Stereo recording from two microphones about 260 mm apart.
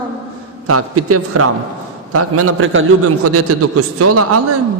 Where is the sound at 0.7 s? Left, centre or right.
Right.